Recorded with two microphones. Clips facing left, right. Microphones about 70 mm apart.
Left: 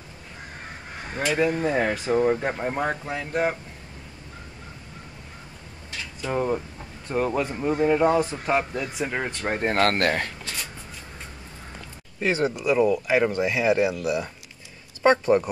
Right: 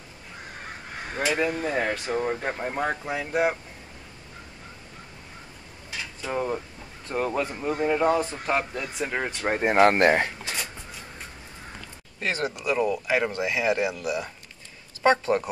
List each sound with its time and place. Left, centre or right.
1.1 s speech: centre
5.9 s a sound: centre
7.1 s speech: centre
12.2 s speech: centre
12.5 s speech: centre